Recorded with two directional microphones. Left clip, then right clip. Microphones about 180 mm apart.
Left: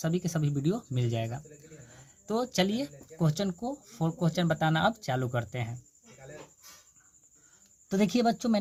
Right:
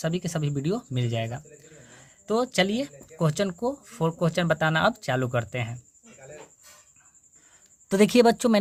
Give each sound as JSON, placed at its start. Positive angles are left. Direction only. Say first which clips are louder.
{"t": 0.0, "sound": "a man's voice", "louder": "right 3 dB", "side_deg": -15}
{"t": 7.9, "sound": "speech", "louder": "right 9 dB", "side_deg": -35}